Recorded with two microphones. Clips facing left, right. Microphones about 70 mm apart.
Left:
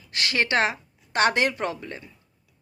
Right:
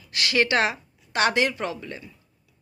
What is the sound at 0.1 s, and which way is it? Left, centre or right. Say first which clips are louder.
Speech: right 2 dB; left.